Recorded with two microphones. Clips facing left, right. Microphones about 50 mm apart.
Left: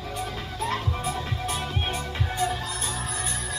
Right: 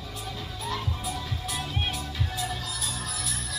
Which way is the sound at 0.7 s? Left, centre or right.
Left.